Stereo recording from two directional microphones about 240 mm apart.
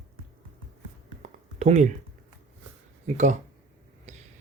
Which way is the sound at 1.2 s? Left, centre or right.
Right.